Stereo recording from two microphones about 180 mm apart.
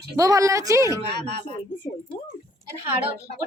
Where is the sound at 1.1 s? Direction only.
65° right (ahead or behind).